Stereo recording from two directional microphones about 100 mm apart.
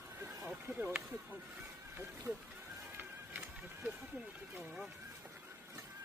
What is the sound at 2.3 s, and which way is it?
Speech, 30° right (ahead or behind).